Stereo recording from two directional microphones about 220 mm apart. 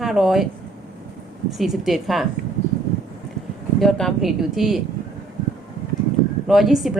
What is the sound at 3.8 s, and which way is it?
A woman's voice, centre (ahead or behind).